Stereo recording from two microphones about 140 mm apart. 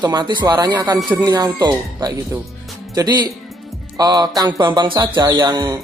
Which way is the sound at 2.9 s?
25° right (ahead or behind).